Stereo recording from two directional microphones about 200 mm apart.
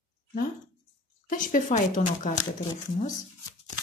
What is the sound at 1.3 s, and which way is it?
A woman's voice, 40° left (ahead or behind).